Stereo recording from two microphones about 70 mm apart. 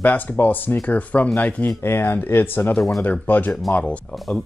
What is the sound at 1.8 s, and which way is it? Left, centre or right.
Speech, left.